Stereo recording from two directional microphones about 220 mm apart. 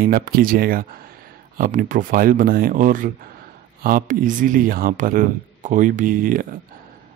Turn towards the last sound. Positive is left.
turn(degrees=-40)  # may be behind; listen again after turning